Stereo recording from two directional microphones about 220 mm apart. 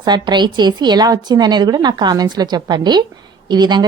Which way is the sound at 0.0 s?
20° right (ahead or behind).